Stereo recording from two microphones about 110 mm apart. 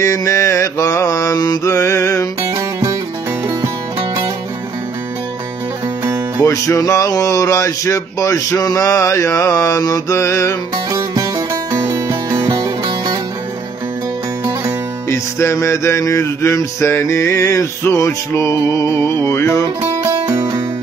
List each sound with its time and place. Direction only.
0.0 s music: 25° left (ahead or behind)
2.5 s music: 30° right (ahead or behind)
6.4 s music: 30° left (ahead or behind)
10.9 s music: 35° right (ahead or behind)
15.0 s music: 25° left (ahead or behind)
20.0 s music: 35° right (ahead or behind)